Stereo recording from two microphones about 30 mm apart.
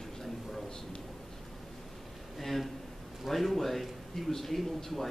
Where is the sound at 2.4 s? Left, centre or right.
Centre.